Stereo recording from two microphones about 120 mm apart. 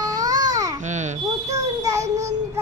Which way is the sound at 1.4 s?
30° right (ahead or behind).